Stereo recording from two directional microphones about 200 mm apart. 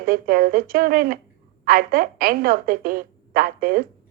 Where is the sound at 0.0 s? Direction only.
45° right (ahead or behind).